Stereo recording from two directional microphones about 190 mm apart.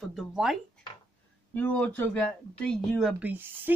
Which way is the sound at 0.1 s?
Centre (ahead or behind).